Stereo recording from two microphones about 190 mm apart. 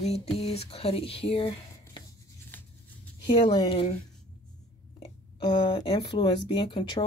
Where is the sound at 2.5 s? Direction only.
10° left (ahead or behind).